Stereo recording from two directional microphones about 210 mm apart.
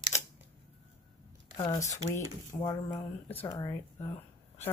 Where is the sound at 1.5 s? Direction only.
20° left (ahead or behind).